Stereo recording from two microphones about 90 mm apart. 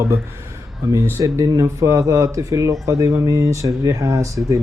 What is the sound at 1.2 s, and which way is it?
Mantra, 40° right (ahead or behind).